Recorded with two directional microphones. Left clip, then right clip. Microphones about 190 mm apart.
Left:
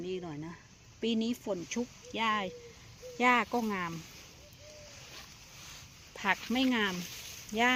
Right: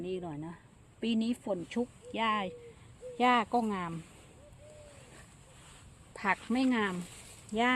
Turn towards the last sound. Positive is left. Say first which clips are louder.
# left 1 dB
turn(degrees=-15)  # may be behind; listen again after turning